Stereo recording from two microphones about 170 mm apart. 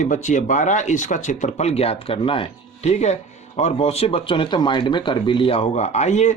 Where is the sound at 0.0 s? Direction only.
45° left (ahead or behind).